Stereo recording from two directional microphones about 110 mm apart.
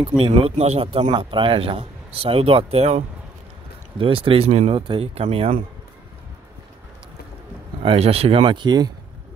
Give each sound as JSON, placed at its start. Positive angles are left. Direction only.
{"t": 0.2, "sound": "a man's voice", "side_deg": -65}
{"t": 4.0, "sound": "a man's voice", "side_deg": -55}
{"t": 7.8, "sound": "a man's voice", "side_deg": -60}
{"t": 8.5, "sound": "speech", "side_deg": -45}